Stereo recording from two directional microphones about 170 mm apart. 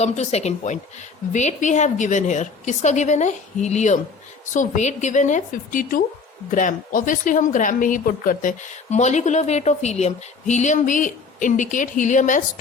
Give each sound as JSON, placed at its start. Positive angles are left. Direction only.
{"t": 0.0, "sound": "speech", "side_deg": 40}